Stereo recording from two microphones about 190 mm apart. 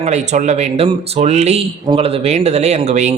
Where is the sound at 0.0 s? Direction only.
35° right (ahead or behind).